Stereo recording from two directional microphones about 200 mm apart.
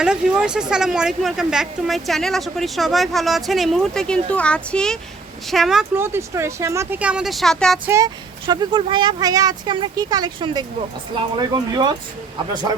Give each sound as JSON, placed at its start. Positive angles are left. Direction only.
{"t": 0.0, "sound": "speech", "side_deg": -5}
{"t": 7.9, "sound": "speech", "side_deg": -15}